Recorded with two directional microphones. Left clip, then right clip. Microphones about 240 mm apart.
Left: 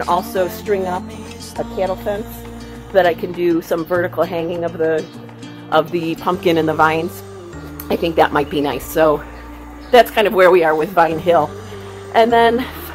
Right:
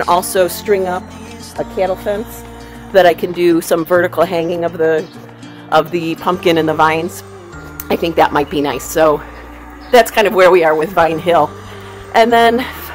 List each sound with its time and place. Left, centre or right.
0.0 s speech: right
2.1 s speech: right
5.7 s speech: centre